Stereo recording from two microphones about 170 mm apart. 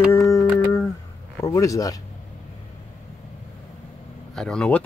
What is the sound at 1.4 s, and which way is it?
Speech, 20° left (ahead or behind).